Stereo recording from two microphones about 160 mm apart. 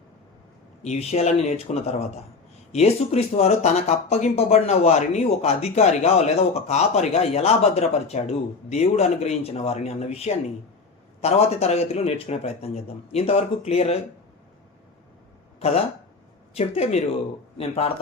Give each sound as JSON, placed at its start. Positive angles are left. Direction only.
{"t": 0.8, "sound": "speech", "side_deg": 45}
{"t": 16.6, "sound": "speech", "side_deg": 40}